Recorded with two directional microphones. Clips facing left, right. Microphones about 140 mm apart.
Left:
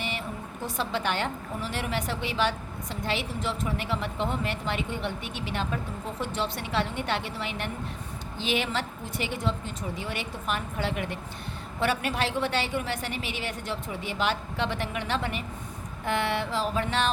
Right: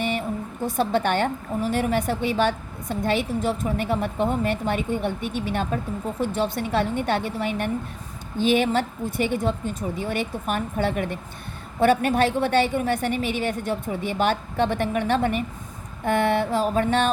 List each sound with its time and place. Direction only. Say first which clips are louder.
0.0 s a woman's voice: right 8 dB; 50° right (ahead or behind)